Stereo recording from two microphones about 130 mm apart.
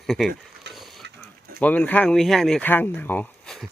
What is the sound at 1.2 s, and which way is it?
Speech, 10° left (ahead or behind).